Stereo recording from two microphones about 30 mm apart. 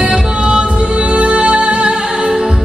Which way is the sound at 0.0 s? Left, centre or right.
Right.